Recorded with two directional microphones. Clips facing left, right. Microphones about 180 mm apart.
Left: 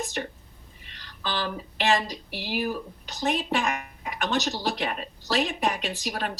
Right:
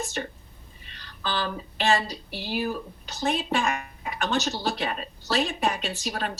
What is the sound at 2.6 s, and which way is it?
Speech, 40° left (ahead or behind).